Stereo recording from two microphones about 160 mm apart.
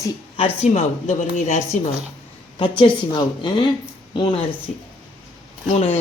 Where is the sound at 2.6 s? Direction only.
30° left (ahead or behind).